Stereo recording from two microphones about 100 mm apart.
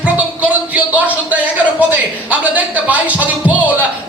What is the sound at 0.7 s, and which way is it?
Speech, 15° right (ahead or behind).